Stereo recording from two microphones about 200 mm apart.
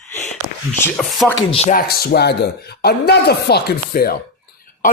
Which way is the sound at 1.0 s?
Centre (ahead or behind).